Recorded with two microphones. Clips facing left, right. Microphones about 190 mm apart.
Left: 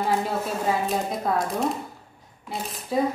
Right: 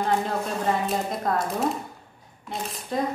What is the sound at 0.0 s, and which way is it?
A woman's voice, 5° left (ahead or behind).